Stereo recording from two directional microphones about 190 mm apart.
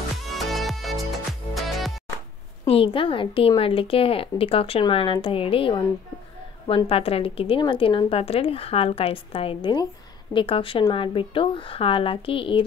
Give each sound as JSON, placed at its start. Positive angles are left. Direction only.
{"t": 0.4, "sound": "music", "side_deg": 0}
{"t": 2.6, "sound": "speech", "side_deg": 30}